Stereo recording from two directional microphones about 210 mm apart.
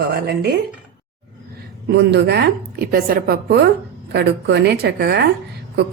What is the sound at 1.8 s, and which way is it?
A woman's voice, 55° right (ahead or behind).